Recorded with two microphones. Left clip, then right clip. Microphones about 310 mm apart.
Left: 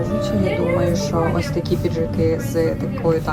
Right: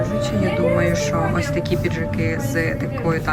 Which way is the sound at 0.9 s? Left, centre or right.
Centre.